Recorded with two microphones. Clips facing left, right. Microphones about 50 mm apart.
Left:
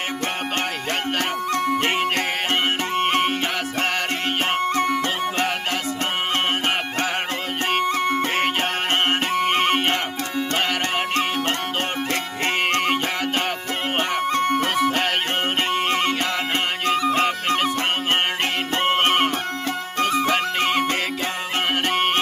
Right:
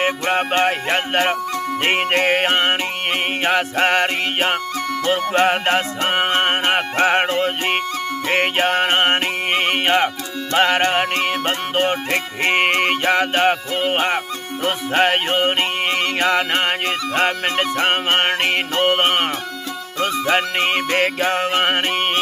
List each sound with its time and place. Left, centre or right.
0.0 s music: right
8.3 s music: right
14.9 s music: right
19.0 s music: right